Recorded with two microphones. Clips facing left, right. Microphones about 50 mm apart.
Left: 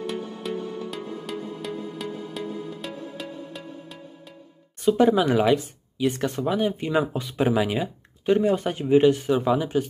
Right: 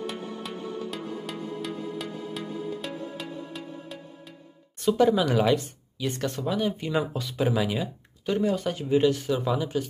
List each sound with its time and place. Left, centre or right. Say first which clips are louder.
0.0 s music: left 3 dB; centre
4.9 s speech: left 2 dB; left